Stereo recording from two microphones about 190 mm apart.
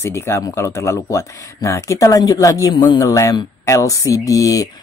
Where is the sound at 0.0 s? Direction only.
15° left (ahead or behind).